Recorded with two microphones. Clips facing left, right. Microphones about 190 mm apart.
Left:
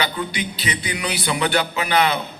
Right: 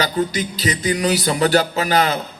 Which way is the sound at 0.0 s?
40° right (ahead or behind).